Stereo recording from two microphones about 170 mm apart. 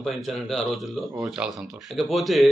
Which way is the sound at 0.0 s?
Centre (ahead or behind).